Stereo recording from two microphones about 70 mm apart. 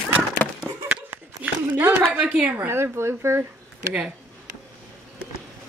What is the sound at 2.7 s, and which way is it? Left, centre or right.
Speech, right.